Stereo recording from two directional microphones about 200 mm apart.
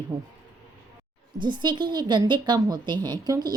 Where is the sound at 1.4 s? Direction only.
20° right (ahead or behind).